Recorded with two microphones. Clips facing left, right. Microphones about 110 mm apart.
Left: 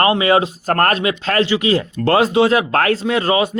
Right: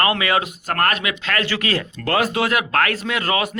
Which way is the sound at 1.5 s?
20° left (ahead or behind).